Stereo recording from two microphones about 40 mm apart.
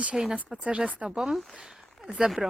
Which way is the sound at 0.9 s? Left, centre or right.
Right.